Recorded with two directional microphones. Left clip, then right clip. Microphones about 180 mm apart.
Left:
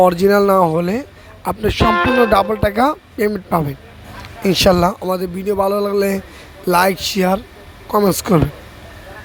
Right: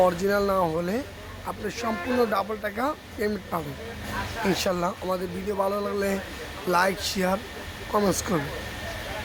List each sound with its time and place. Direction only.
0.3 s a man's voice: 40° left (ahead or behind)
1.9 s speech: 55° left (ahead or behind)
2.4 s a man's voice: 40° left (ahead or behind)
4.4 s a man's voice: 40° left (ahead or behind)